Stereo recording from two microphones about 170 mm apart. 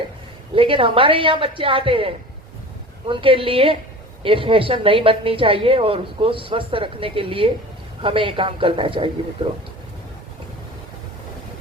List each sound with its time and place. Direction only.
0.5 s a woman's voice: 30° right (ahead or behind)